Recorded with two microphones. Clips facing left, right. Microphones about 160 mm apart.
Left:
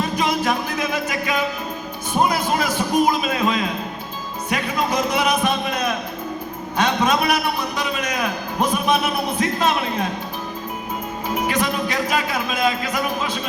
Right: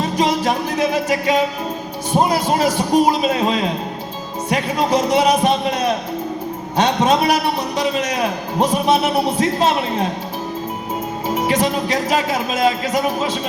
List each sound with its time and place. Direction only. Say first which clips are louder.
0.0 s music: right 3 dB; 35° right (ahead or behind)
2.1 s a man's voice: right 3 dB; 35° right (ahead or behind)
11.3 s a man's voice: right 4 dB; 40° right (ahead or behind)